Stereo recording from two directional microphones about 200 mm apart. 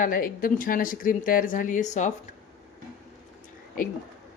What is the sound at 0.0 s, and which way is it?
A woman's voice, 45° left (ahead or behind).